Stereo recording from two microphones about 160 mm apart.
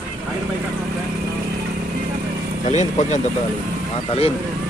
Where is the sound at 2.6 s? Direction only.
45° left (ahead or behind).